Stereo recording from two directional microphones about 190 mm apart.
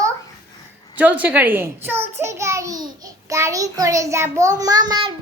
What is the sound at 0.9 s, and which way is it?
A child's voice, 10° right (ahead or behind).